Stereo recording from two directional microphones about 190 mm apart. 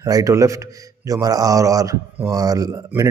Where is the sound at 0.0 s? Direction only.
15° right (ahead or behind).